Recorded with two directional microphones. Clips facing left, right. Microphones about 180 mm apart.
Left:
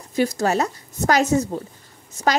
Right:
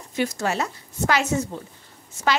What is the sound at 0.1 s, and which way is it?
A woman's voice, 35° left (ahead or behind).